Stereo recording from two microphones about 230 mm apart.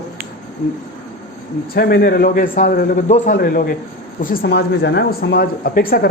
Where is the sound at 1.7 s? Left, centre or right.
Left.